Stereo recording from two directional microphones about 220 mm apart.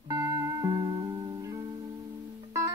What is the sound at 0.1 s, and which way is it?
Music, 15° right (ahead or behind).